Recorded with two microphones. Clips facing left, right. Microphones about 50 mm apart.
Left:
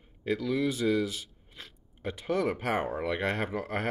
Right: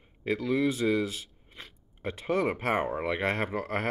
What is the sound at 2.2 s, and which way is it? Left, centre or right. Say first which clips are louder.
Speech: right 1 dB; right.